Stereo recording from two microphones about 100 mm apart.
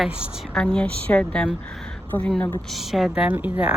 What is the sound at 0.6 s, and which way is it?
Speech, 10° left (ahead or behind).